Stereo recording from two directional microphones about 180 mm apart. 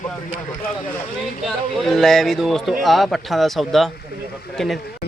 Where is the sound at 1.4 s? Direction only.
Centre (ahead or behind).